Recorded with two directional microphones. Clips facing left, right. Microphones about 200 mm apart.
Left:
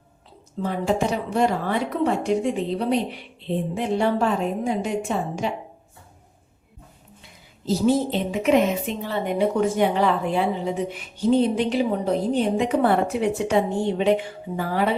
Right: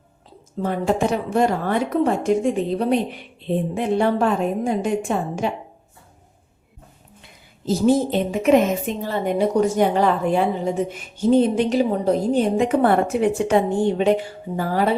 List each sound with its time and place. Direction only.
0.6 s a woman's voice: 50° right (ahead or behind)
7.6 s a woman's voice: 50° right (ahead or behind)